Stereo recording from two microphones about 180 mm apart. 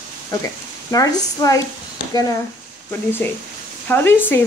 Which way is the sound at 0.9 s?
20° left (ahead or behind).